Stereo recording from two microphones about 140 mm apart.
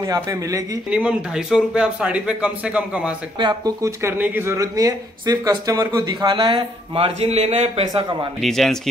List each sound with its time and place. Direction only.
0.0 s speech: 25° right (ahead or behind)
0.8 s speech: 10° right (ahead or behind)
3.3 s speech: 30° right (ahead or behind)
4.2 s speech: 15° right (ahead or behind); by 7.8 s 50° right (ahead or behind)
8.4 s speech: centre (ahead or behind)